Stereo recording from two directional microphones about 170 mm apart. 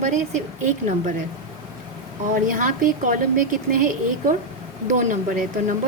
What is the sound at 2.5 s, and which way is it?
A woman's voice, 50° right (ahead or behind).